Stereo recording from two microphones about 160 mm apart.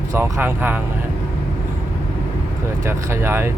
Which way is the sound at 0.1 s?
15° right (ahead or behind).